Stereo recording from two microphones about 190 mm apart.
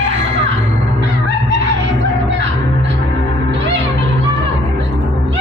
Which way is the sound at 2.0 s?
70° right (ahead or behind).